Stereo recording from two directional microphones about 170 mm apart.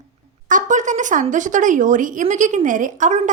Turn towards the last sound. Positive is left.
turn(degrees=-45)  # may be behind; listen again after turning